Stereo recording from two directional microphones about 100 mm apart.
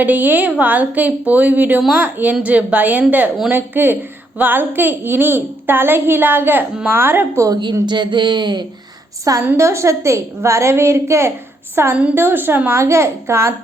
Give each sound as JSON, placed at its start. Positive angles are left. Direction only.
{"t": 0.0, "sound": "a woman's voice", "side_deg": -15}
{"t": 7.4, "sound": "a woman's voice", "side_deg": -45}
{"t": 9.6, "sound": "a woman's voice", "side_deg": -30}
{"t": 11.9, "sound": "a woman's voice", "side_deg": -10}